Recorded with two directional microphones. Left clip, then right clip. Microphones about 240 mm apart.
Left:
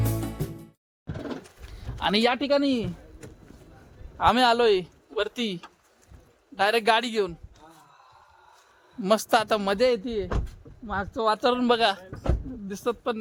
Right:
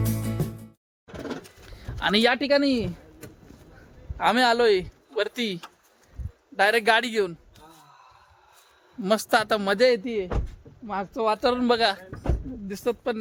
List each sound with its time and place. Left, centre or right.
0.4 s music: centre
1.6 s speech: centre
4.2 s a man's voice: centre
6.6 s speech: centre
9.0 s speech: centre